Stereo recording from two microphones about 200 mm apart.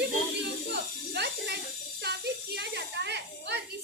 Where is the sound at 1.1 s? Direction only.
55° right (ahead or behind).